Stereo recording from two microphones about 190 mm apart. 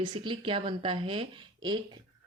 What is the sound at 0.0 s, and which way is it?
A woman's voice, 25° right (ahead or behind).